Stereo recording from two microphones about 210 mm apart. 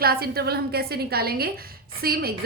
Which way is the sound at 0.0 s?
45° right (ahead or behind).